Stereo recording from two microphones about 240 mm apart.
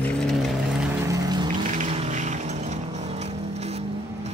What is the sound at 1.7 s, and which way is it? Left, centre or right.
Vehicle, right.